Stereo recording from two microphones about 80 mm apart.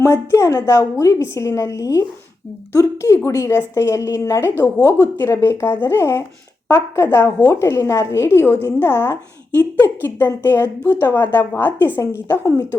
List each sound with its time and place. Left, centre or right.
0.0 s a woman's voice: left
4.8 s speech: right
5.1 s a woman's voice: left
12.3 s a woman's voice: left